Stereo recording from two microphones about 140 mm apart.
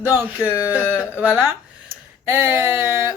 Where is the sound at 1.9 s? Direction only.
15° right (ahead or behind).